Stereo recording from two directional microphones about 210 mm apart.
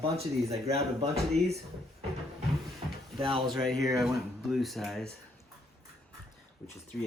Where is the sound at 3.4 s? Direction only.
Centre (ahead or behind).